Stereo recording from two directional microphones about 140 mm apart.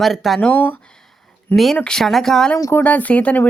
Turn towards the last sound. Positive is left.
turn(degrees=10)  # may be behind; listen again after turning